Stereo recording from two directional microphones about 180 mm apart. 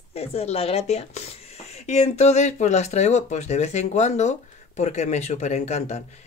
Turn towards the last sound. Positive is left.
turn(degrees=40)  # may be behind; listen again after turning